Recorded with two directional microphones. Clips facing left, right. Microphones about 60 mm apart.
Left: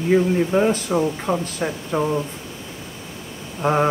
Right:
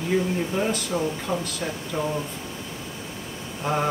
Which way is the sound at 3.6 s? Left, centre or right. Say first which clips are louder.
Left 6 dB; left.